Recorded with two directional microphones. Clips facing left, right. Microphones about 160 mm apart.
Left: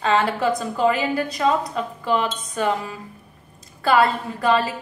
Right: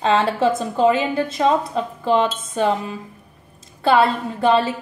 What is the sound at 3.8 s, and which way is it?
Speech, 25° right (ahead or behind).